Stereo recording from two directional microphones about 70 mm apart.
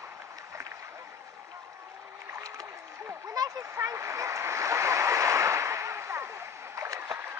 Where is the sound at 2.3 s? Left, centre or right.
Right.